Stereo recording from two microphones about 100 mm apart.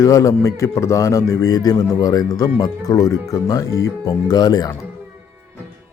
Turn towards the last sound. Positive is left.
turn(degrees=40)  # may be behind; listen again after turning